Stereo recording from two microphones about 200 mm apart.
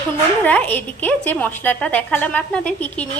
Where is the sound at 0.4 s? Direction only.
10° left (ahead or behind).